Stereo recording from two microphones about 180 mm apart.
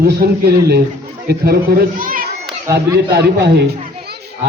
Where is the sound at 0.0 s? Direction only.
60° right (ahead or behind).